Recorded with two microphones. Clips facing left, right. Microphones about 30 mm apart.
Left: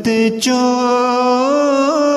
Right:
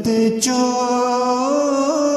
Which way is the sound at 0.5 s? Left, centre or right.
Left.